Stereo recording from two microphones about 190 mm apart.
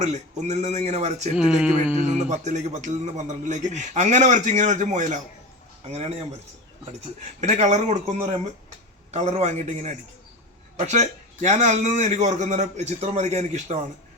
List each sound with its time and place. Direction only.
0.0 s a man's voice: 35° right (ahead or behind)
1.4 s speech: 5° right (ahead or behind)
2.1 s a man's voice: 40° right (ahead or behind)
7.4 s a man's voice: 35° right (ahead or behind)
9.1 s a man's voice: 35° right (ahead or behind)